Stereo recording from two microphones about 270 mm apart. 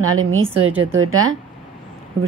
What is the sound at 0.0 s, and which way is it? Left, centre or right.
Speech, right.